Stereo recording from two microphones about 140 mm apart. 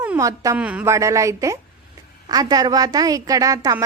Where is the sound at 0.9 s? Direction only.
20° right (ahead or behind).